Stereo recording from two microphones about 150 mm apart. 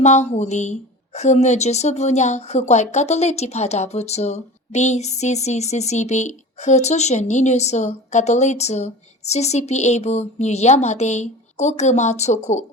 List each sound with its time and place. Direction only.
0.0 s a woman's voice: 50° left (ahead or behind)